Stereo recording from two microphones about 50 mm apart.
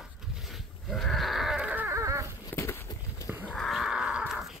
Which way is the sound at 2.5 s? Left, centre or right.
Left.